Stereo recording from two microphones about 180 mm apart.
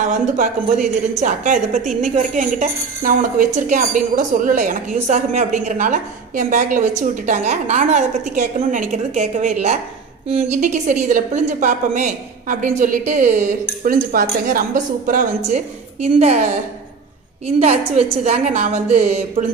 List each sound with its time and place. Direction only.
0.0 s a woman's voice: 45° right (ahead or behind)
17.6 s a woman's voice: 35° right (ahead or behind)